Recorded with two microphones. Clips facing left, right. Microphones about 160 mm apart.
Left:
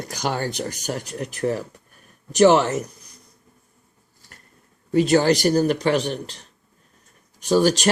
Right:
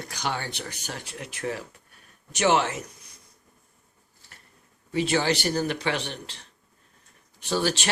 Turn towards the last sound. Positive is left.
turn(degrees=40)  # may be behind; listen again after turning